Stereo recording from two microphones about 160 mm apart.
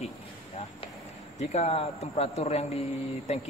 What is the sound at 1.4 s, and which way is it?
Speech, 40° left (ahead or behind).